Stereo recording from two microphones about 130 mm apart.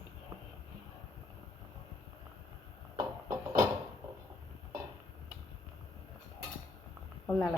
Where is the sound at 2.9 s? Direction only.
25° right (ahead or behind).